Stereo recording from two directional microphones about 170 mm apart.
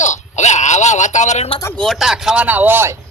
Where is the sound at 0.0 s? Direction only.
45° left (ahead or behind).